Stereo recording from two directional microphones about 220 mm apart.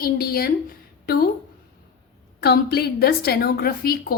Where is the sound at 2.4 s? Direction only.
45° left (ahead or behind).